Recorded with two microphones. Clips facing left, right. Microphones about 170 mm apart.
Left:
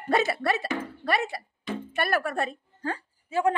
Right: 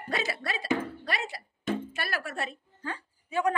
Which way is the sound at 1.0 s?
55° left (ahead or behind).